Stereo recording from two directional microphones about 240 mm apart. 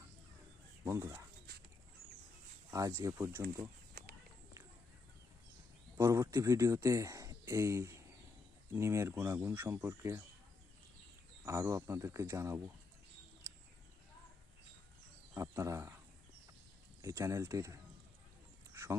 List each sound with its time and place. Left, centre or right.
0.9 s speech: centre
1.5 s a sound: right
2.6 s speech: centre
6.0 s speech: centre
11.4 s speech: centre
15.4 s speech: centre
17.0 s speech: centre
18.7 s a sound: centre